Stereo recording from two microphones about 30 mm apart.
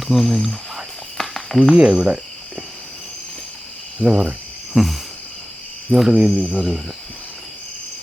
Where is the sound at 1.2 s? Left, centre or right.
Centre.